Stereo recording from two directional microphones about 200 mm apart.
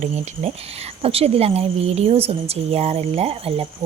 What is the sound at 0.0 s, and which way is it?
Speech, 30° right (ahead or behind).